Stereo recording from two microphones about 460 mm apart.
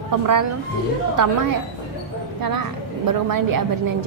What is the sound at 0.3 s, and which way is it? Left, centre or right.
A woman's voice, right.